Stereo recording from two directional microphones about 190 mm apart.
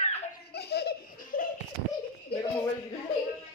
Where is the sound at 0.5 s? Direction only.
60° left (ahead or behind).